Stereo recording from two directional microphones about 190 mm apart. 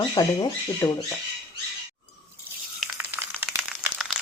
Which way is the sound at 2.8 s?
10° right (ahead or behind).